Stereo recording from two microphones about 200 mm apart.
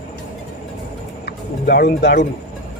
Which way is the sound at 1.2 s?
55° left (ahead or behind).